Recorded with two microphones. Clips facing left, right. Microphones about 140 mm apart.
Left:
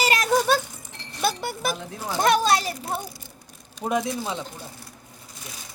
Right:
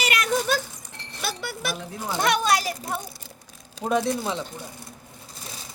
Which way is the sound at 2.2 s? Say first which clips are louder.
Left 2 dB; 30° left (ahead or behind).